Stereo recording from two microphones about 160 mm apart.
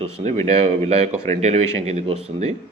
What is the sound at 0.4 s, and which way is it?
Speech, 40° right (ahead or behind).